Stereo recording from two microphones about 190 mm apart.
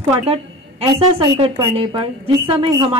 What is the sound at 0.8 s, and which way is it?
Speech, 30° right (ahead or behind).